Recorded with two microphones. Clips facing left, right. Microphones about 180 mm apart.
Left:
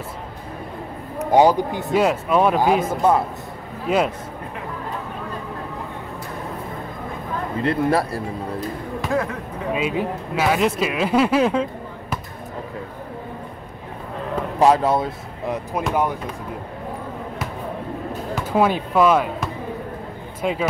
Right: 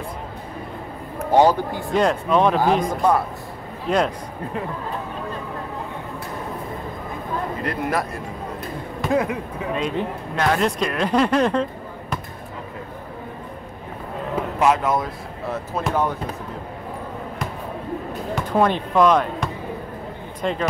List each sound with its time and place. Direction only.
1.2 s speech: 10° left (ahead or behind)
3.0 s speech: 25° left (ahead or behind)
3.9 s speech: 5° left (ahead or behind)
7.6 s speech: 30° left (ahead or behind)
9.1 s speech: 15° right (ahead or behind)
9.8 s speech: 5° left (ahead or behind)
14.6 s speech: 30° left (ahead or behind)
15.4 s speech: 15° left (ahead or behind)
18.3 s speech: 5° left (ahead or behind)